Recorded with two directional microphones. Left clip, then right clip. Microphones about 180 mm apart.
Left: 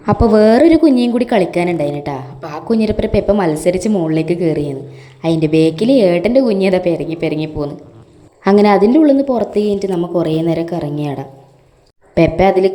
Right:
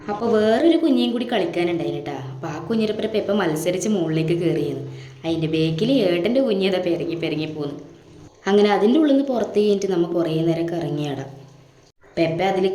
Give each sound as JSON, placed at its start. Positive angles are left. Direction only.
{"t": 0.0, "sound": "a woman's voice", "side_deg": 45}
{"t": 9.0, "sound": "a woman's voice", "side_deg": 20}
{"t": 12.1, "sound": "a woman's voice", "side_deg": 35}